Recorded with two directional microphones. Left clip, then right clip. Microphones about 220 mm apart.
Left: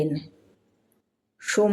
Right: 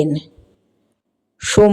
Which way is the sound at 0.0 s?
35° right (ahead or behind).